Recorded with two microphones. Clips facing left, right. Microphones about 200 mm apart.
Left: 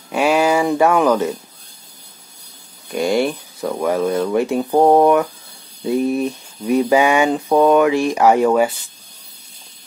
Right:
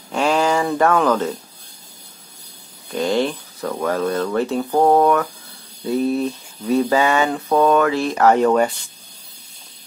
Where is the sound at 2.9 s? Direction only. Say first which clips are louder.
Left 2 dB; 10° left (ahead or behind).